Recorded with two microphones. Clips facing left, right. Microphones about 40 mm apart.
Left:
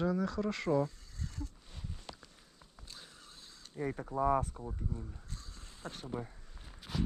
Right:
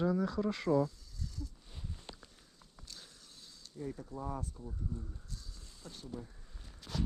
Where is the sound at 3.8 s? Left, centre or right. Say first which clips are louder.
Left 8 dB; left.